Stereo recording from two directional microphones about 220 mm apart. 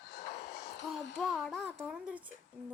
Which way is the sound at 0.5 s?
45° left (ahead or behind).